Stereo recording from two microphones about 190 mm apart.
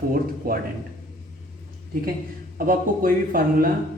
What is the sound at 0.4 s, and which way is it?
Speech, 50° right (ahead or behind).